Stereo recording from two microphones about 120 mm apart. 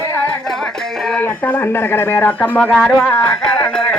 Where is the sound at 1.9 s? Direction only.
20° left (ahead or behind).